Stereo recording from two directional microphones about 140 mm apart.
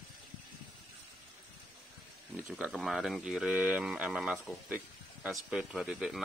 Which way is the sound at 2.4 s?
5° right (ahead or behind).